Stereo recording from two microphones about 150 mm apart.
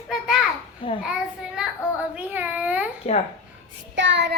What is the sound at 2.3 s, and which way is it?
Speech, 10° right (ahead or behind).